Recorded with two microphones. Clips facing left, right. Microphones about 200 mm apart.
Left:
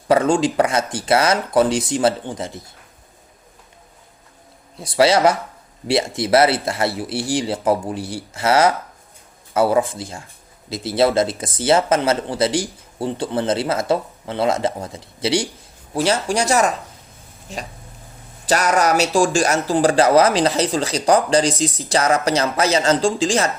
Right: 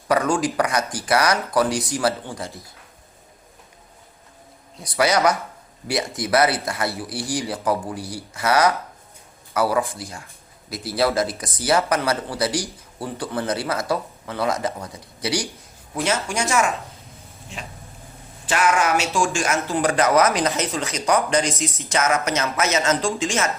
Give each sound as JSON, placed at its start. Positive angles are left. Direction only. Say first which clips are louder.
{"t": 0.1, "sound": "speech", "louder": "left 4 dB", "side_deg": 25}
{"t": 4.8, "sound": "speech", "louder": "left 4 dB", "side_deg": 25}